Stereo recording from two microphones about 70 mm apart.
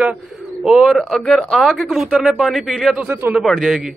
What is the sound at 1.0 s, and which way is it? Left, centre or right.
Speech, centre.